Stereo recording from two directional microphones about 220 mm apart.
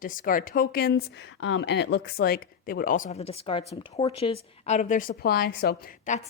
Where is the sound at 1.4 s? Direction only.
55° left (ahead or behind).